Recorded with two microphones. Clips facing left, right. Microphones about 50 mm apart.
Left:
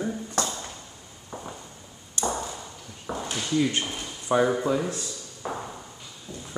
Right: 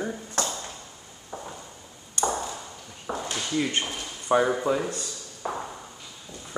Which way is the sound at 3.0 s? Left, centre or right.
Centre.